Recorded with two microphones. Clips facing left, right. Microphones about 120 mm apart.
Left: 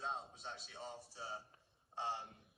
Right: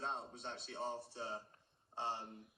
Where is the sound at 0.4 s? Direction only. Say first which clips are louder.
Right 6 dB; 60° right (ahead or behind).